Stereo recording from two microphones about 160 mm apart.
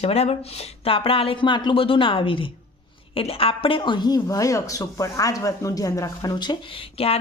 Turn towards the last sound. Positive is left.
turn(degrees=35)  # may be behind; listen again after turning